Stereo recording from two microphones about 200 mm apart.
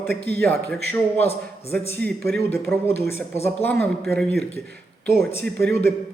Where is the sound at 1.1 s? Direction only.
30° left (ahead or behind).